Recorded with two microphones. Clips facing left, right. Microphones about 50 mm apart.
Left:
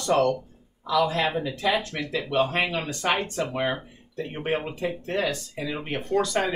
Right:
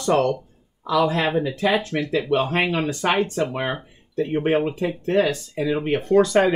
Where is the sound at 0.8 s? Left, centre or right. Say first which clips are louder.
Right 3 dB; right.